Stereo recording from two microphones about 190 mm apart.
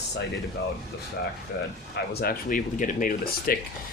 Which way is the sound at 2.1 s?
50° left (ahead or behind).